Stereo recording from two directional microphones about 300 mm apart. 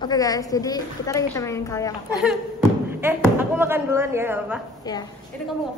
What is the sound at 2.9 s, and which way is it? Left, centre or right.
Speech, centre.